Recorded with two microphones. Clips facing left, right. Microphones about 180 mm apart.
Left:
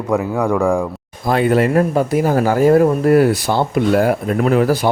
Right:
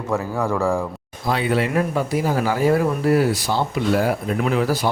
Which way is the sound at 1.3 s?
50° left (ahead or behind).